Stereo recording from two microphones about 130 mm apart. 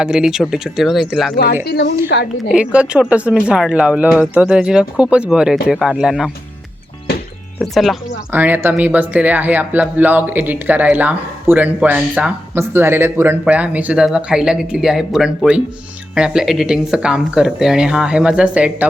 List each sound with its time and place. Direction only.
0.0 s speech: 5° right (ahead or behind)
2.5 s speech: 10° right (ahead or behind)
7.6 s speech: centre (ahead or behind)
8.3 s speech: 15° right (ahead or behind)